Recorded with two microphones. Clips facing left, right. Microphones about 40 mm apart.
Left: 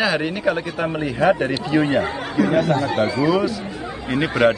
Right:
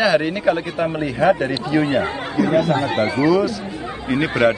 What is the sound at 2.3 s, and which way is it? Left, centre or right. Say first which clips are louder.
Speech: right 1 dB; left.